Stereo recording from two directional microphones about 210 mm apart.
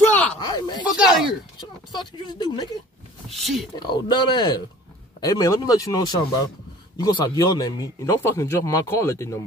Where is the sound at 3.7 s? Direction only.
20° left (ahead or behind).